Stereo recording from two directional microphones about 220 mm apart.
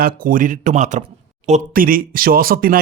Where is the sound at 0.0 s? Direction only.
40° right (ahead or behind).